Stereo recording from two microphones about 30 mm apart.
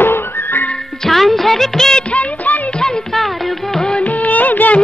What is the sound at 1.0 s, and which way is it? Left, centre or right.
Music, centre.